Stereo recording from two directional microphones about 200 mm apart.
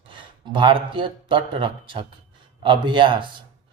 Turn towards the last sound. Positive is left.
turn(degrees=-25)  # may be behind; listen again after turning